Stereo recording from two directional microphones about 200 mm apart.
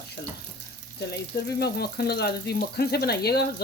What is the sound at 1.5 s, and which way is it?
Speech, 50° left (ahead or behind).